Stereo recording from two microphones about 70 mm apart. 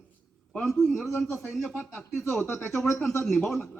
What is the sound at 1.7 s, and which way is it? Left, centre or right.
Speech, centre.